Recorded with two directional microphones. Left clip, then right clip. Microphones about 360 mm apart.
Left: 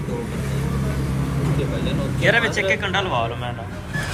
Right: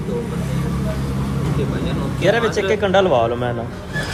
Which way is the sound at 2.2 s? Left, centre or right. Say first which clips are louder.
Right 1 dB; centre.